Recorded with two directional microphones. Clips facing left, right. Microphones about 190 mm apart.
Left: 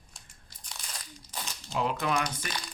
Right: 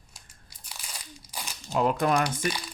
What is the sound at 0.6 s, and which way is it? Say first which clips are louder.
Crumpling: right 1 dB; 10° right (ahead or behind).